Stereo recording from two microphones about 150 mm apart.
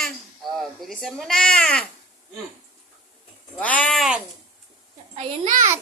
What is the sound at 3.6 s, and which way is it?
Speech, 10° left (ahead or behind).